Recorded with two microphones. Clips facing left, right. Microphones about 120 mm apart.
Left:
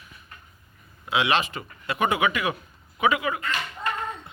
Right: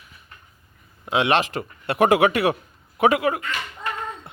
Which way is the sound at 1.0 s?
50° right (ahead or behind).